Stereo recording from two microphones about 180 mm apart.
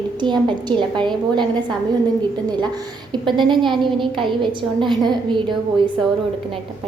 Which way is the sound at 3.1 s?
25° right (ahead or behind).